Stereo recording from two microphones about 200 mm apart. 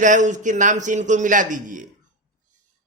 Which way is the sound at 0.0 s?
40° right (ahead or behind).